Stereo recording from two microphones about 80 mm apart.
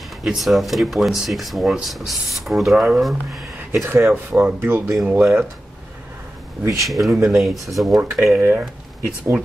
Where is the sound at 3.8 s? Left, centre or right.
Right.